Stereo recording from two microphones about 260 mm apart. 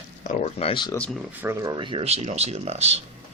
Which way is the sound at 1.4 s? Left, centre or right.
Centre.